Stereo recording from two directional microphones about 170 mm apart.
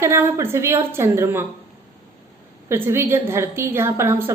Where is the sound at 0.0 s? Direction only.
15° right (ahead or behind).